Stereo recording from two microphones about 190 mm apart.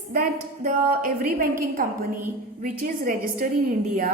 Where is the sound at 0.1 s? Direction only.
45° right (ahead or behind).